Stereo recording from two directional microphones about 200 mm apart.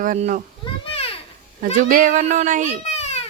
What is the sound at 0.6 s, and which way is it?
Children playing, 25° left (ahead or behind).